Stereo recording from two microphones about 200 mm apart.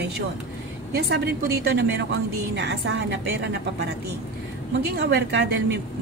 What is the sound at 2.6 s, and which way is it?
Speech, 55° right (ahead or behind).